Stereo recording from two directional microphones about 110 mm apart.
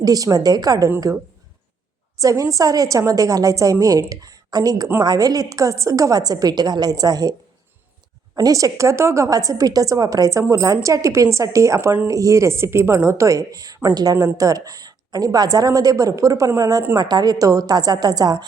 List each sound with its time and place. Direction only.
0.0 s a woman's voice: 35° right (ahead or behind)
2.1 s a woman's voice: 30° right (ahead or behind)
8.4 s a woman's voice: 35° right (ahead or behind)